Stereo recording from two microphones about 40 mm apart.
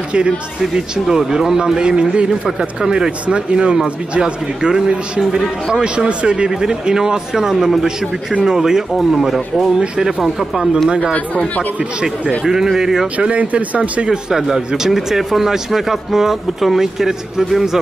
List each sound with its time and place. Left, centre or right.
0.6 s a man's voice: centre
7.5 s a man's voice: centre
8.5 s speech: centre
10.2 s speech: centre
10.9 s a man's voice: right
11.1 s speech: left
12.4 s speech: centre
13.3 s speech: right
14.0 s a man's voice: right